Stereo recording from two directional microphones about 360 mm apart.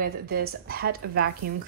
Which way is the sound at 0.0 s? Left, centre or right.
Right.